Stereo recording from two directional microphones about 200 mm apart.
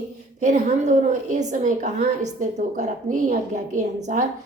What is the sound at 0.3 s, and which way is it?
A woman's voice, 35° right (ahead or behind).